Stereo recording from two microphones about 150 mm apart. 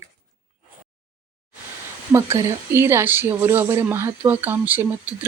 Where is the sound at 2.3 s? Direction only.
20° right (ahead or behind).